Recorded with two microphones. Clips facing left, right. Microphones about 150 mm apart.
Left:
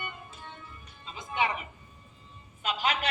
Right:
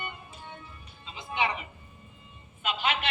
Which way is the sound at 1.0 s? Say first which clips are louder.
Even; 45° left (ahead or behind).